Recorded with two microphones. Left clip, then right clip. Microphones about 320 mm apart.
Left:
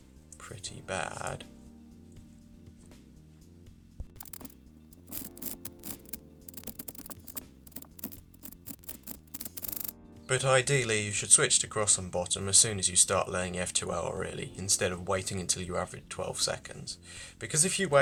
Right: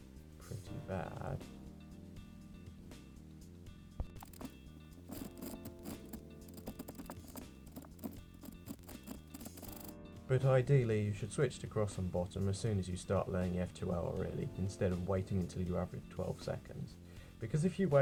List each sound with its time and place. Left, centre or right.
0.4 s speech: left
5.5 s music: centre
9.3 s music: centre
10.2 s speech: left